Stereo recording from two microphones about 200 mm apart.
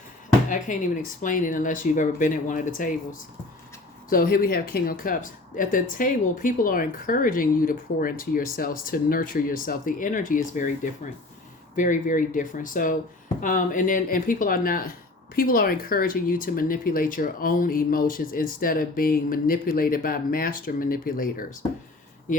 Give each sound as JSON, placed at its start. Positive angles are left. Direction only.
{"t": 0.5, "sound": "speech", "side_deg": 40}